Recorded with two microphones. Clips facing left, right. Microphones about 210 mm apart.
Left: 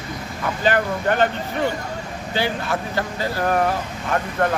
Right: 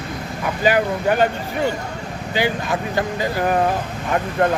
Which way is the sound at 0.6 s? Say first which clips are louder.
Right 2 dB; 10° right (ahead or behind).